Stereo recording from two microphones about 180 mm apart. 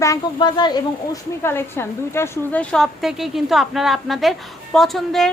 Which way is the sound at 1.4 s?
15° left (ahead or behind).